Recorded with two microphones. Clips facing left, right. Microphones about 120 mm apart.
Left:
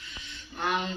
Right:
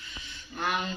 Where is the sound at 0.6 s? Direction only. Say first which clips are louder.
Left 1 dB; 25° left (ahead or behind).